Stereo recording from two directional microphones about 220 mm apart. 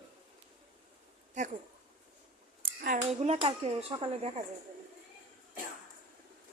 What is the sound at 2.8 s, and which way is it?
A child's voice, 35° right (ahead or behind).